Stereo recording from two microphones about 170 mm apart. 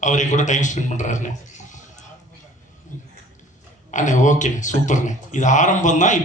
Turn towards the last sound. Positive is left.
turn(degrees=45)  # may be behind; listen again after turning